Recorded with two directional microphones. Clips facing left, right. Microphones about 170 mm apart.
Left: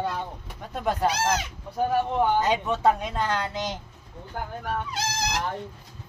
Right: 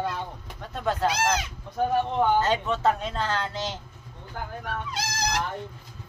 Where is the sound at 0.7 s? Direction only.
10° left (ahead or behind).